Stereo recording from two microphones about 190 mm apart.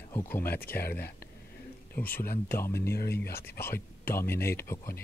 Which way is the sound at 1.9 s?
10° left (ahead or behind).